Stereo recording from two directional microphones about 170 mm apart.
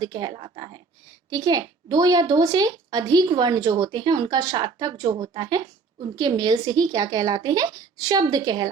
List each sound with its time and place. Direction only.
0.0 s a woman's voice: 25° right (ahead or behind)